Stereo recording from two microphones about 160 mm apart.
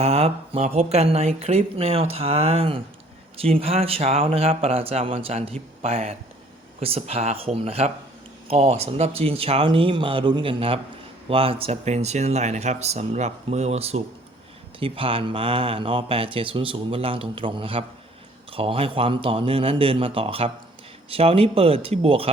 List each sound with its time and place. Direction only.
0.0 s speech: 40° right (ahead or behind)